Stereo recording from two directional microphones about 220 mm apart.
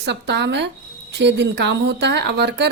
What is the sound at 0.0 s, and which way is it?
A woman's voice, 50° right (ahead or behind).